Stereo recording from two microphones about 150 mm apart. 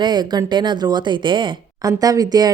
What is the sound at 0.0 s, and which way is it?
Speech, 30° right (ahead or behind).